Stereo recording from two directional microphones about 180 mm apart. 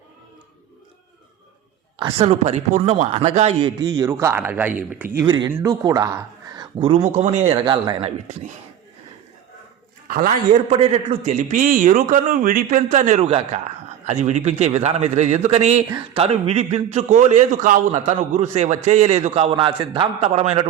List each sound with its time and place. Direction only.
2.1 s a man's voice: 35° right (ahead or behind)
3.8 s speech: 25° right (ahead or behind)
5.1 s speech: 20° right (ahead or behind)
10.1 s a man's voice: 45° right (ahead or behind)
15.9 s speech: 20° right (ahead or behind)
16.2 s a man's voice: 35° right (ahead or behind)